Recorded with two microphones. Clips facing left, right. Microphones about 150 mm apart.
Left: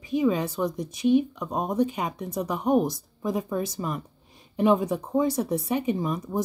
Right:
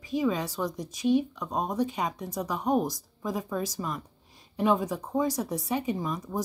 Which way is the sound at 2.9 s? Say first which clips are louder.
Left 4 dB; 25° left (ahead or behind).